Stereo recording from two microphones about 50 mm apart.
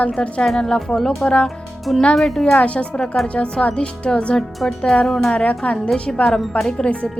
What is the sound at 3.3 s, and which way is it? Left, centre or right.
Speech, left.